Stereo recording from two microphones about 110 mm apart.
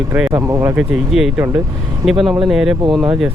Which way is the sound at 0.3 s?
30° right (ahead or behind).